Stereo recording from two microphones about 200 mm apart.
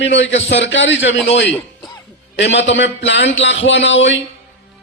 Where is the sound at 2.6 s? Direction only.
65° left (ahead or behind).